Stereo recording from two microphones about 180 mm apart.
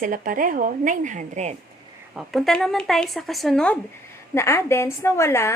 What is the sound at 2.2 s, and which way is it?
A woman's voice, centre (ahead or behind).